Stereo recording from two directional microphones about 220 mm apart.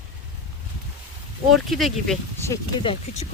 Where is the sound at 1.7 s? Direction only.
Centre (ahead or behind).